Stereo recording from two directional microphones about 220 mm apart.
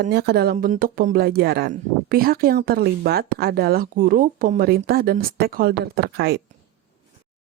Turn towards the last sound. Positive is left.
turn(degrees=-45)  # may be behind; listen again after turning